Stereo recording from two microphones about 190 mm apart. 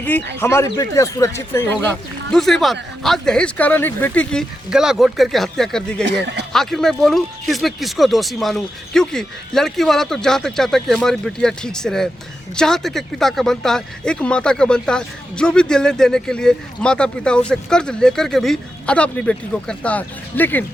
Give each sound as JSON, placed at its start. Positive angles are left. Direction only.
{"t": 0.3, "sound": "speech", "side_deg": 15}
{"t": 2.3, "sound": "speech", "side_deg": 0}
{"t": 6.1, "sound": "speech", "side_deg": -65}
{"t": 6.5, "sound": "speech", "side_deg": 0}